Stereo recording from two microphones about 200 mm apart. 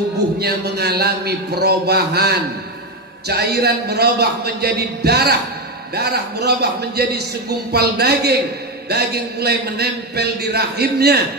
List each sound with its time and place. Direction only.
0.4 s a man's voice: 55° right (ahead or behind)